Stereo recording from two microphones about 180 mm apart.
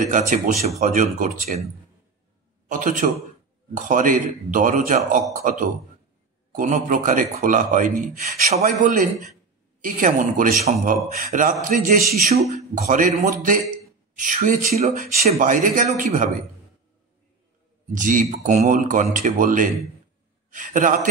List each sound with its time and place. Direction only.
0.0 s speech: 45° right (ahead or behind)
2.7 s speech: 45° right (ahead or behind)
17.9 s speech: 45° right (ahead or behind)